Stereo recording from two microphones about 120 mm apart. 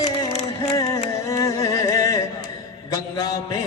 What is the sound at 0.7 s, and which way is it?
Music, 25° left (ahead or behind).